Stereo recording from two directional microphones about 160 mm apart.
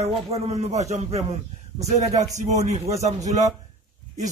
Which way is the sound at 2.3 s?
45° right (ahead or behind).